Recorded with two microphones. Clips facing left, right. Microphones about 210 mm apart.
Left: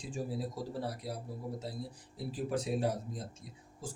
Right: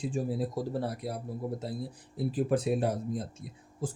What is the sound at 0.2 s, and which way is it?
Speech, 55° right (ahead or behind).